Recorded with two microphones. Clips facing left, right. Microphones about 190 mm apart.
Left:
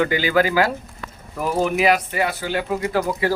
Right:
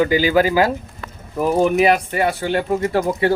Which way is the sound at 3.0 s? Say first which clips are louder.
Right 2 dB; 25° right (ahead or behind).